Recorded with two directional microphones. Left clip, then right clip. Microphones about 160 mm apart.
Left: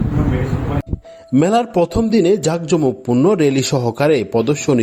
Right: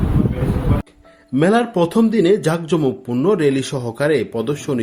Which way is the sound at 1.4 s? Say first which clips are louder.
Left 1 dB; 45° left (ahead or behind).